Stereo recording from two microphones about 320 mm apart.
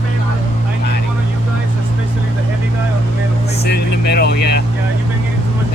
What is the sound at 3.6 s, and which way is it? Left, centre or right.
Vehicle, left.